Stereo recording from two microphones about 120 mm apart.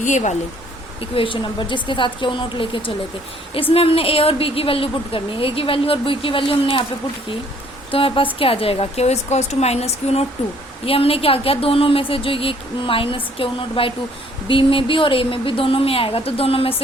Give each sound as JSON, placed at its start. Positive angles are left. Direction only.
{"t": 0.0, "sound": "speech", "side_deg": 85}
{"t": 1.1, "sound": "a woman's voice", "side_deg": 45}
{"t": 7.9, "sound": "a woman's voice", "side_deg": 50}